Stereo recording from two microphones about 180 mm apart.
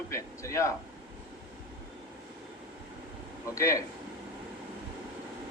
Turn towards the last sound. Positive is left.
turn(degrees=15)  # may be behind; listen again after turning